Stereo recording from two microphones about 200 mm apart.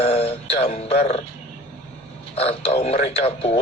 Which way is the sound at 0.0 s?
30° left (ahead or behind).